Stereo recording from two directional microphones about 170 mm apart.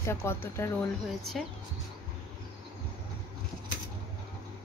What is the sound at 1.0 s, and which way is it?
Speech, centre (ahead or behind).